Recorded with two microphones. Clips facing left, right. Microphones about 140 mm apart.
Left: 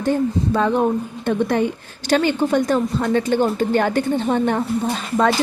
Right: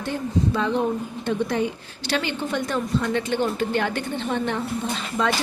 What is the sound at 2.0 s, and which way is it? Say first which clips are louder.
A woman's voice: left 8 dB; 45° left (ahead or behind).